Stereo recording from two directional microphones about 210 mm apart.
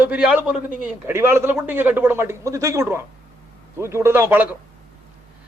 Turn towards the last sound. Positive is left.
turn(degrees=-10)  # may be behind; listen again after turning